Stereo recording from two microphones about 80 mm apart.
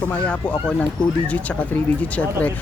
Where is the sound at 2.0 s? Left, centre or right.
Centre.